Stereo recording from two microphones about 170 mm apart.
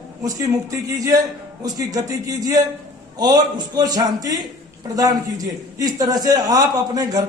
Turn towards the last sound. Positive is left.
turn(degrees=-25)  # may be behind; listen again after turning